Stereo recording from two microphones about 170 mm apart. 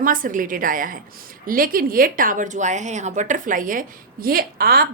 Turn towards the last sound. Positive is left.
turn(degrees=-60)  # may be behind; listen again after turning